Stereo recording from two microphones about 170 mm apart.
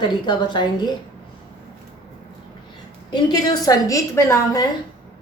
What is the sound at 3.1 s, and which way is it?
A woman's voice, 25° left (ahead or behind).